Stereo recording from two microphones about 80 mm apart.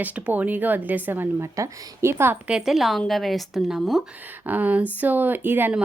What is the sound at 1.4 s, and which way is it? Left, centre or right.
Speech, right.